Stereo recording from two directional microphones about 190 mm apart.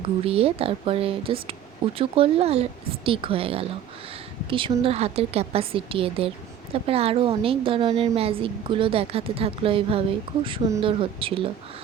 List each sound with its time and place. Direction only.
0.3 s a woman's voice: 30° right (ahead or behind)